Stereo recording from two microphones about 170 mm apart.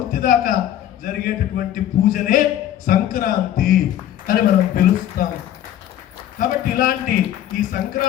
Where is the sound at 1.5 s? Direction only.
55° left (ahead or behind).